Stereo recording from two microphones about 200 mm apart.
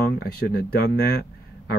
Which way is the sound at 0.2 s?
50° left (ahead or behind).